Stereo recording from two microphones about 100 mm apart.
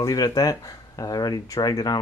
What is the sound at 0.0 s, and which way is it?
Speech, 40° left (ahead or behind).